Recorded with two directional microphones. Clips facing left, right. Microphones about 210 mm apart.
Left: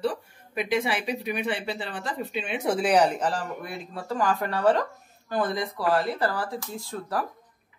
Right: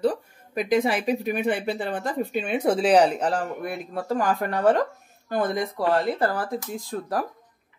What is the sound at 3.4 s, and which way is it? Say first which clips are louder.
Speech: right 5 dB; 50° right (ahead or behind).